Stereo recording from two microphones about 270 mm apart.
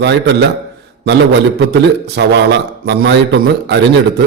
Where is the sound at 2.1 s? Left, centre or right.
Right.